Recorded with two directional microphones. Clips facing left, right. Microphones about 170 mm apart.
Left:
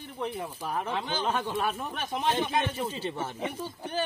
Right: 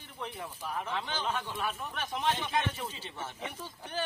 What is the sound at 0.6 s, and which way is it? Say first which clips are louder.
Speech: left 4 dB; 45° left (ahead or behind).